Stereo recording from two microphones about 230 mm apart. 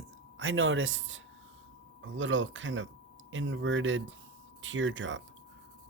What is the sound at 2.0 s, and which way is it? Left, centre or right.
Speech, right.